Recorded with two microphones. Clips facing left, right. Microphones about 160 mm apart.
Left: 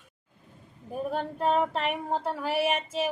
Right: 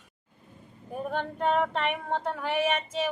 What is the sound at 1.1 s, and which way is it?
A woman's voice, 35° left (ahead or behind).